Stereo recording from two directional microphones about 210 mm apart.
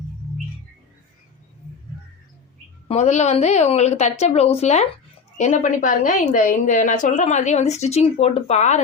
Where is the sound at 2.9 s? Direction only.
30° left (ahead or behind).